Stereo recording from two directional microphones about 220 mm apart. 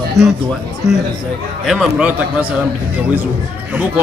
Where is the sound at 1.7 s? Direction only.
Centre (ahead or behind).